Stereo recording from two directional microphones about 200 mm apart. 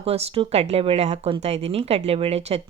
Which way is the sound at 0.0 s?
30° right (ahead or behind).